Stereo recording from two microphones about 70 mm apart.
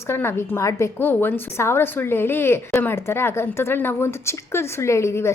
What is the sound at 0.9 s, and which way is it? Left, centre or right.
A woman's voice, left.